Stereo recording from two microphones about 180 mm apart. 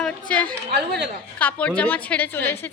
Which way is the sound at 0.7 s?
65° right (ahead or behind).